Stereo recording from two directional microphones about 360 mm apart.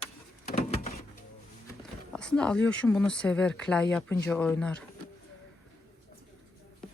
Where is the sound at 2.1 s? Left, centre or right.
Centre.